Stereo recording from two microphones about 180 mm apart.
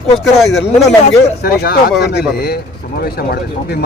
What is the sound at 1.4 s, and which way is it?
Speech, 60° left (ahead or behind).